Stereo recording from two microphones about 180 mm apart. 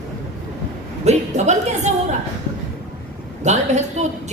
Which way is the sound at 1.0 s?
40° right (ahead or behind).